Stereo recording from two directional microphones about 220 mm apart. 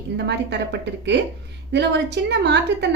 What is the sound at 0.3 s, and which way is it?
A woman's voice, 50° right (ahead or behind).